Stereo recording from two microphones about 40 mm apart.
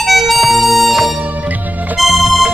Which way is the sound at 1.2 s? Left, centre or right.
Right.